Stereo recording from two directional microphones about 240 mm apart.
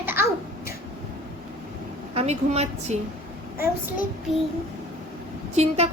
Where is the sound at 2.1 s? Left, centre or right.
Right.